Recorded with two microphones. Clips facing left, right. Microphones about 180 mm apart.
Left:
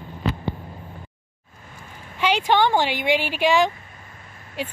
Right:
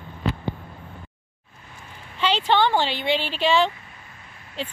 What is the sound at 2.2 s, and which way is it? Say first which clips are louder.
Speech: left 1 dB; 10° left (ahead or behind).